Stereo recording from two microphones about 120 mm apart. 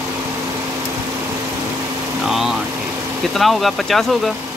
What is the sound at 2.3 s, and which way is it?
Vehicle, centre (ahead or behind).